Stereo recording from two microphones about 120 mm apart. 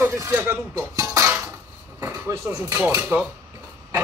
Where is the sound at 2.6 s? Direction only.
20° right (ahead or behind).